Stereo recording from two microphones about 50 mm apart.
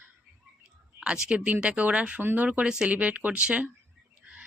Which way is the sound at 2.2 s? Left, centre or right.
Right.